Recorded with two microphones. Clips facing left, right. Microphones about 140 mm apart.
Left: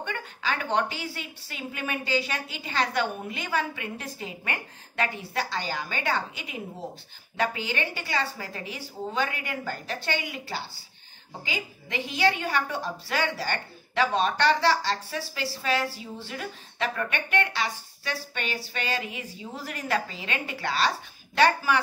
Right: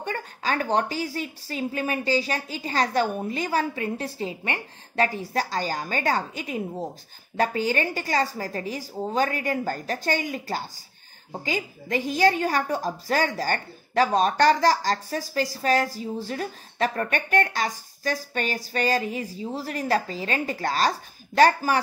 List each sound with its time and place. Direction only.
0.0 s a woman's voice: 40° right (ahead or behind)